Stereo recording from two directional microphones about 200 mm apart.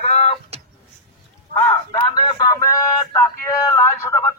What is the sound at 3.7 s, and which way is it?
Speech, 10° left (ahead or behind).